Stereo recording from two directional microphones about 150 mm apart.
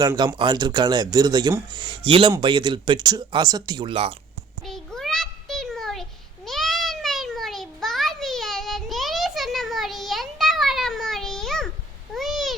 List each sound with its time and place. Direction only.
0.0 s speech: 20° right (ahead or behind); by 4.1 s 35° right (ahead or behind)
4.6 s a sound: centre (ahead or behind)
12.1 s cat: centre (ahead or behind)